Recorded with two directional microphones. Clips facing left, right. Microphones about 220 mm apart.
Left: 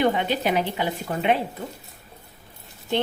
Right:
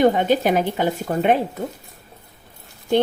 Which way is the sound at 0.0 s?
45° right (ahead or behind).